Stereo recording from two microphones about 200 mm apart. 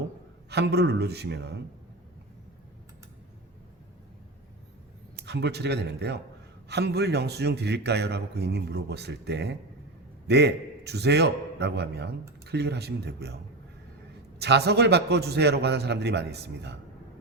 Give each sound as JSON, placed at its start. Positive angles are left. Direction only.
{"t": 0.5, "sound": "a man's voice", "side_deg": -55}
{"t": 5.2, "sound": "a man's voice", "side_deg": -55}
{"t": 14.3, "sound": "a man's voice", "side_deg": -55}